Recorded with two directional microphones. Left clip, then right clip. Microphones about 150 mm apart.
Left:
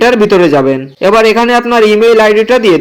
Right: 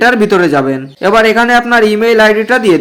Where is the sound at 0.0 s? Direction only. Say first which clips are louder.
Left 2 dB; 10° left (ahead or behind).